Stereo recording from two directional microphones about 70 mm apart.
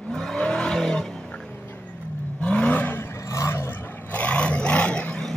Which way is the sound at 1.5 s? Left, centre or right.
Left.